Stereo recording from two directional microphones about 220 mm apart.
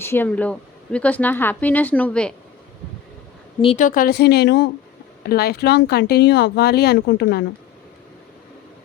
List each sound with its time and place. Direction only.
0.0 s speech: 10° left (ahead or behind)
3.6 s speech: 30° left (ahead or behind); by 7.4 s 50° left (ahead or behind)